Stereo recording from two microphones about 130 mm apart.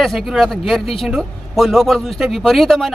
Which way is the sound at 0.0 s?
Centre (ahead or behind).